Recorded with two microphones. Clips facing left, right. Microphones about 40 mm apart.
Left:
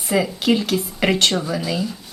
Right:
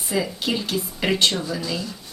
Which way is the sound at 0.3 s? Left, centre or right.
Left.